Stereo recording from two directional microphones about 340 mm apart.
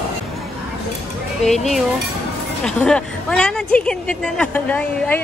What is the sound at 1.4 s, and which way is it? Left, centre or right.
A woman's voice, centre.